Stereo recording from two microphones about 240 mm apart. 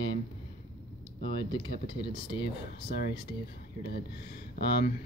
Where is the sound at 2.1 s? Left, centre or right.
Left.